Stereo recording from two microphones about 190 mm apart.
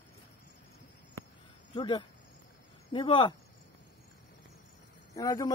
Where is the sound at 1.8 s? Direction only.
20° left (ahead or behind).